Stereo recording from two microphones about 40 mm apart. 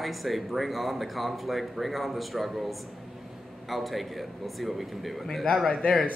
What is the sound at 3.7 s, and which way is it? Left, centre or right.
Speech, centre.